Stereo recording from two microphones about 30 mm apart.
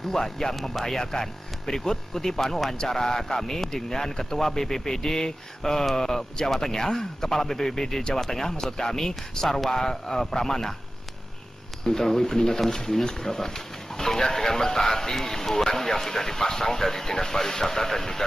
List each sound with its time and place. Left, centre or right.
0.1 s speech: centre
0.6 s speech: centre
0.9 s speech: centre
11.8 s speech: centre